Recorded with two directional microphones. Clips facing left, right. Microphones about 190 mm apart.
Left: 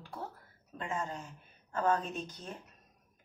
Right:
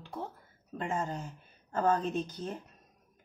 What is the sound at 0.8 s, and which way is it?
Speech, 40° right (ahead or behind).